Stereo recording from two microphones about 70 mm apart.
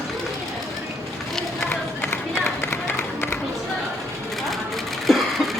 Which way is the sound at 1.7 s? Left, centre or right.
Left.